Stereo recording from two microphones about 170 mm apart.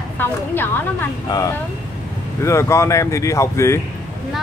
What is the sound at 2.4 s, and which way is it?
Speech, 15° left (ahead or behind).